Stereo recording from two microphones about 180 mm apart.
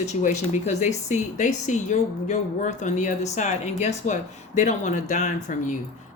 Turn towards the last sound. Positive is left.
turn(degrees=45)  # may be behind; listen again after turning